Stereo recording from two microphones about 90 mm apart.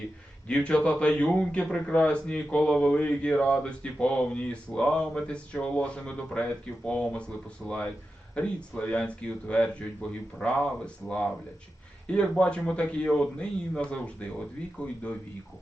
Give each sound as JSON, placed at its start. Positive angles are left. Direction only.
{"t": 0.4, "sound": "a man's voice", "side_deg": 10}